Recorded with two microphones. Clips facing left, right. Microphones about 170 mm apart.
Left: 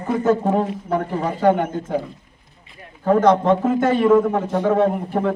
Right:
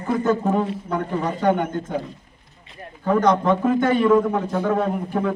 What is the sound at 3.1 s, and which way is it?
Speech, 30° left (ahead or behind).